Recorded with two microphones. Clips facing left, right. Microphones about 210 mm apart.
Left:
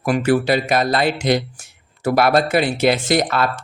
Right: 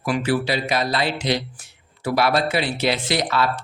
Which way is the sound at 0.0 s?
50° left (ahead or behind).